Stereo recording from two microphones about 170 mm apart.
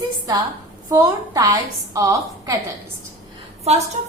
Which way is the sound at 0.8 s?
20° right (ahead or behind).